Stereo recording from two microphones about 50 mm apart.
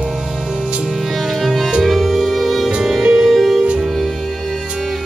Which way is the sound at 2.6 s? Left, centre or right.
Centre.